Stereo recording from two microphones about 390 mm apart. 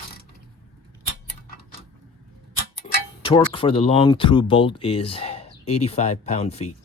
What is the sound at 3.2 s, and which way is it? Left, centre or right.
Speech, centre.